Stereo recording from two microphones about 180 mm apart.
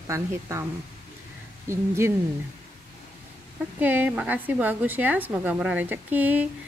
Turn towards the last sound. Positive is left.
turn(degrees=-10)  # may be behind; listen again after turning